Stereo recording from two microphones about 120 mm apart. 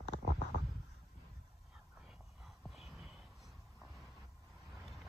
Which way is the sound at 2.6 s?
5° right (ahead or behind).